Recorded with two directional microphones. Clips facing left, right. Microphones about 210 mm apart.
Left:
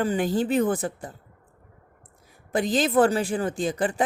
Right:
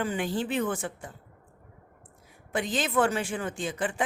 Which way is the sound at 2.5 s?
40° left (ahead or behind).